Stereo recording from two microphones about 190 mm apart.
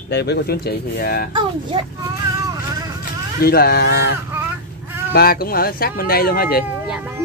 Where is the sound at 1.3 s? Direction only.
25° right (ahead or behind).